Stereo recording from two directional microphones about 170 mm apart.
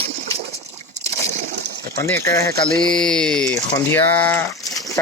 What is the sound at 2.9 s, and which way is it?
Speech, 5° left (ahead or behind).